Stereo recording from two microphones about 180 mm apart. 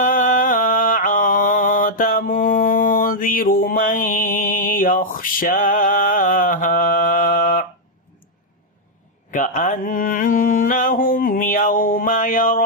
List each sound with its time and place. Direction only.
0.0 s mantra: 50° left (ahead or behind)
9.3 s mantra: 45° left (ahead or behind)